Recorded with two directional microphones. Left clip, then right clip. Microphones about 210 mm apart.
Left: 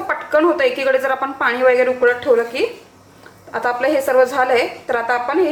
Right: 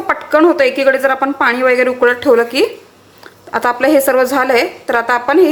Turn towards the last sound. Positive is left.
turn(degrees=-40)  # may be behind; listen again after turning